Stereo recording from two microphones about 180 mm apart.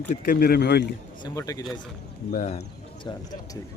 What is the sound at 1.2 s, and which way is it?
Speech, 20° left (ahead or behind).